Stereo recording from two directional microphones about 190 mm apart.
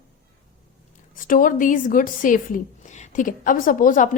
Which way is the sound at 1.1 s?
45° left (ahead or behind).